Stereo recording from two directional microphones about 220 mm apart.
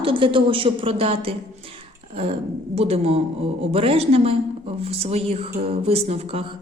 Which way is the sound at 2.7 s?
25° right (ahead or behind).